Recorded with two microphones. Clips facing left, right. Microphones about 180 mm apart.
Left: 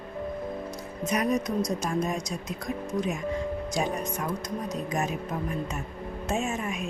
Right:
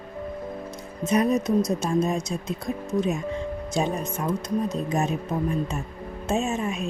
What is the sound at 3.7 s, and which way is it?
Speech, 25° right (ahead or behind).